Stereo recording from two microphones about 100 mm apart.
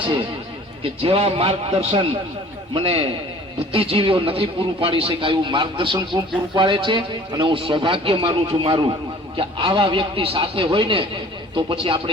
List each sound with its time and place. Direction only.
0.8 s a man's voice: 70° right (ahead or behind)